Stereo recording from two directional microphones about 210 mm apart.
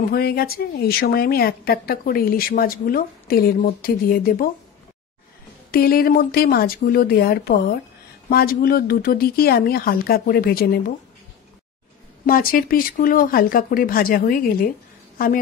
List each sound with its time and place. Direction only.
0.1 s a woman's voice: 45° left (ahead or behind)
5.7 s a woman's voice: 45° left (ahead or behind)
12.3 s a woman's voice: 45° left (ahead or behind)